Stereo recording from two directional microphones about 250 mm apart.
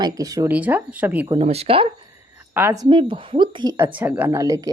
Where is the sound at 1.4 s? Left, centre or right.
Right.